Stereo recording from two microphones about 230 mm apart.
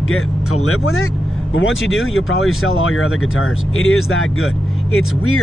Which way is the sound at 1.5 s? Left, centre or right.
Left.